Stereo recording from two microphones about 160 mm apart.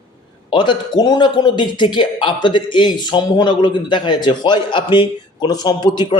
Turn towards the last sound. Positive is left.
turn(degrees=30)  # may be behind; listen again after turning